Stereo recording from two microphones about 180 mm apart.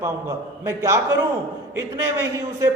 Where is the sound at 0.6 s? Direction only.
15° right (ahead or behind).